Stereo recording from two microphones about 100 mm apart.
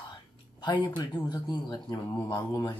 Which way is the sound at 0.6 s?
50° left (ahead or behind).